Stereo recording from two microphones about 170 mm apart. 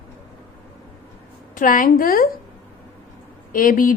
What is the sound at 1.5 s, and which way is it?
Speech, 50° left (ahead or behind).